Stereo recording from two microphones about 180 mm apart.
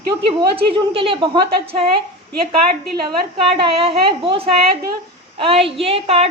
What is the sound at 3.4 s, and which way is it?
A woman's voice, 30° right (ahead or behind).